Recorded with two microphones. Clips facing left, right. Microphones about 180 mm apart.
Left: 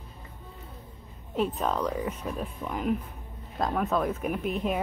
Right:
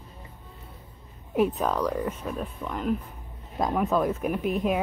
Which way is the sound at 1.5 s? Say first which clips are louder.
Right 2 dB; centre (ahead or behind).